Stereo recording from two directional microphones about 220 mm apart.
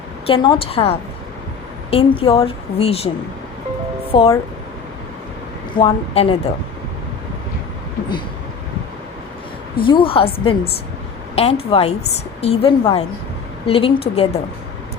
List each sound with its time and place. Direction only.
0.3 s a woman's voice: 25° left (ahead or behind)
4.1 s a woman's voice: 20° left (ahead or behind)
5.7 s a woman's voice: 25° left (ahead or behind)
9.7 s a woman's voice: 25° left (ahead or behind)